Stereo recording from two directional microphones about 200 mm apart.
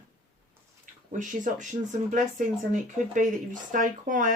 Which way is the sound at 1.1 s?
40° right (ahead or behind).